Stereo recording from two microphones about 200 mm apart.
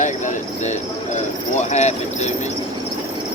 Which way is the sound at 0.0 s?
35° left (ahead or behind).